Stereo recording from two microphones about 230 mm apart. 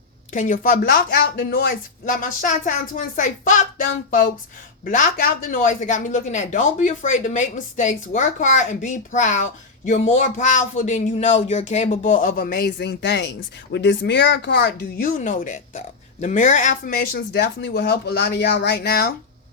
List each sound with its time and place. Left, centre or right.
0.3 s speech: left
4.9 s speech: left